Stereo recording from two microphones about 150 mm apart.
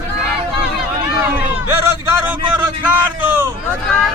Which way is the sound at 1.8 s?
10° right (ahead or behind).